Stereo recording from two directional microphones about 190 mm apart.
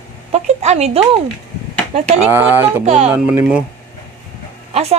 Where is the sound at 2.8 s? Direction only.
35° right (ahead or behind).